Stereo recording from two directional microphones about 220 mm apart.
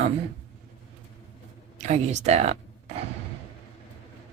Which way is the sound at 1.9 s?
30° right (ahead or behind).